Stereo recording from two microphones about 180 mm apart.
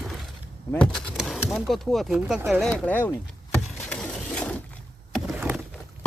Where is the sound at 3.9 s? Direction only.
5° left (ahead or behind).